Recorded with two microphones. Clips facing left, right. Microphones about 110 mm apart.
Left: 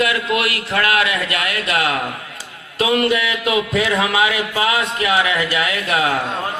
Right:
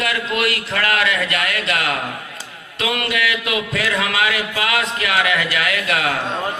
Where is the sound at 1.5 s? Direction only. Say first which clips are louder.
Left 2 dB; 40° left (ahead or behind).